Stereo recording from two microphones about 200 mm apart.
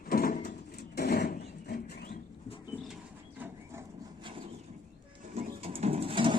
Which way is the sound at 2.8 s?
5° right (ahead or behind).